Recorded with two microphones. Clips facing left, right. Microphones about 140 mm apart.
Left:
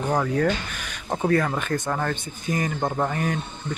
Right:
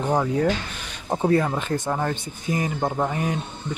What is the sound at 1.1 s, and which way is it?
Speech, 20° right (ahead or behind).